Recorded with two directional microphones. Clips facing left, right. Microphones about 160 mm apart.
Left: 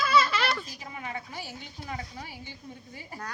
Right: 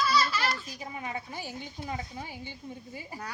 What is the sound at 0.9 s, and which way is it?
Speech, 20° right (ahead or behind).